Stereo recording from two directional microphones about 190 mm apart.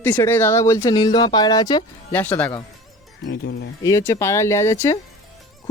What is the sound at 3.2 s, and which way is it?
Speech, 60° left (ahead or behind).